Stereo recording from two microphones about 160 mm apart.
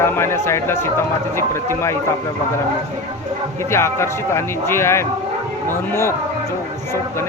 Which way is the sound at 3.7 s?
15° left (ahead or behind).